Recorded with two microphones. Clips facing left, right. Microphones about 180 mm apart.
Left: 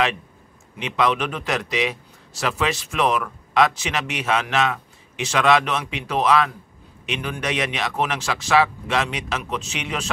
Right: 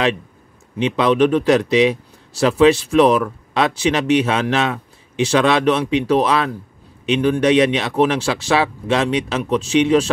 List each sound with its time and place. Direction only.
0.7 s a man's voice: 30° right (ahead or behind)